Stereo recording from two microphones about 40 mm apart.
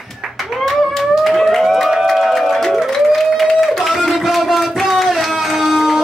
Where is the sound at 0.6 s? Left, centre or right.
Centre.